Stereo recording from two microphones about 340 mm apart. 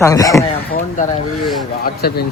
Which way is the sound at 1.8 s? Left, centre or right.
Left.